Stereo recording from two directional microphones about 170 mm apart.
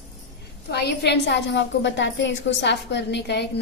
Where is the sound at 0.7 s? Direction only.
80° left.